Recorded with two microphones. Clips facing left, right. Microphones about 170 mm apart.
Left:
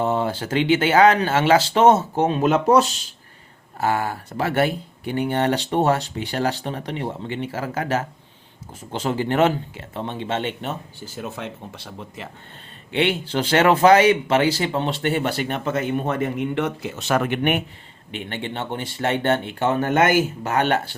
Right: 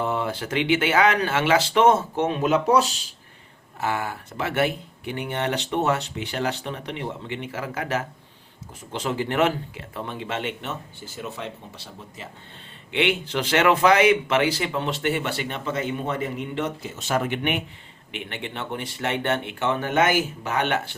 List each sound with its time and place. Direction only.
0.0 s speech: 30° left (ahead or behind)
2.4 s speech: 50° left (ahead or behind)
3.8 s speech: 40° left (ahead or behind)
11.2 s speech: 55° left (ahead or behind)
12.9 s speech: 35° left (ahead or behind); by 17.6 s 50° left (ahead or behind)
18.1 s speech: 30° left (ahead or behind)